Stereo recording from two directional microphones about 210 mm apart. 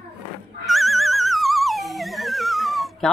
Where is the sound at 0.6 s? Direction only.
Centre (ahead or behind).